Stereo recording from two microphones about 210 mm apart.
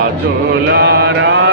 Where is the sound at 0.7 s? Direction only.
50° right (ahead or behind).